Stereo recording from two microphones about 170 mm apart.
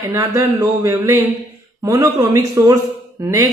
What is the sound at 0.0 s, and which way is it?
Speech, 20° right (ahead or behind).